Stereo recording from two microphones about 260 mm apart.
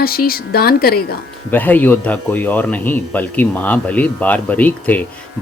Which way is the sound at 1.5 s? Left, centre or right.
Centre.